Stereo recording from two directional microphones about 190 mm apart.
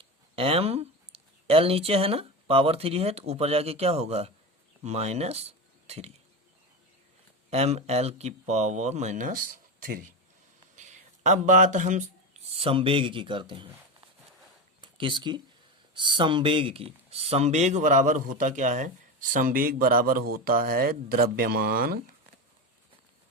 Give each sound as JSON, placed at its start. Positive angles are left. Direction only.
{"t": 0.0, "sound": "speech", "side_deg": -30}
{"t": 7.5, "sound": "speech", "side_deg": -35}
{"t": 14.8, "sound": "a sound", "side_deg": -25}
{"t": 16.0, "sound": "speech", "side_deg": -25}